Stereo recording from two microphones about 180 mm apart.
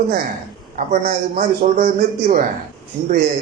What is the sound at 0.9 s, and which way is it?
A man's voice, 45° right (ahead or behind).